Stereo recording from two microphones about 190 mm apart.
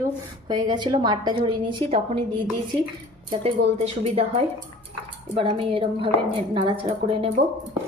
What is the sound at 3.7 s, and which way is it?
A woman's voice, 35° right (ahead or behind).